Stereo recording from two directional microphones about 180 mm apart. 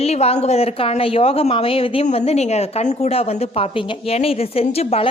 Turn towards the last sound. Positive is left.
turn(degrees=35)  # may be behind; listen again after turning